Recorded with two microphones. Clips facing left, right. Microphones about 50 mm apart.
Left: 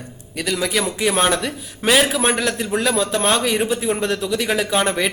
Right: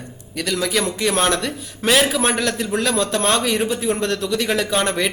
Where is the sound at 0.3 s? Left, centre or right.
Centre.